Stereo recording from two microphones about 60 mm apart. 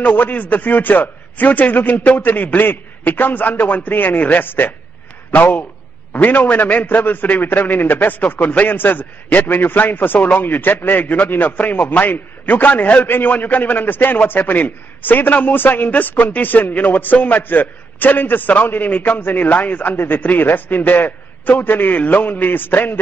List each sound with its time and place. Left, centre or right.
0.0 s a man's voice: left